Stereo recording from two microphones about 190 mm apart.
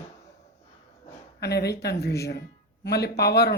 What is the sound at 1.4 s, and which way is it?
Speech, 60° left (ahead or behind).